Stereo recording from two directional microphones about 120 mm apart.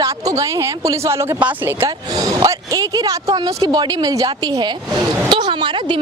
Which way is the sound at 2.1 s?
30° right (ahead or behind).